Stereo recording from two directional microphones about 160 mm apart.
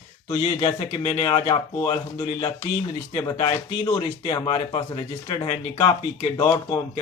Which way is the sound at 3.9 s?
30° left (ahead or behind).